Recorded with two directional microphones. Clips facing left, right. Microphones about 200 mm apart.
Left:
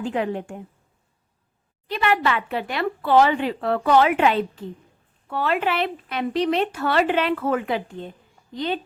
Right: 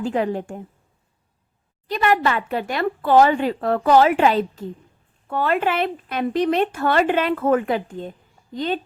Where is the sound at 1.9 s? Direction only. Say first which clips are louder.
Right 2 dB; 40° right (ahead or behind).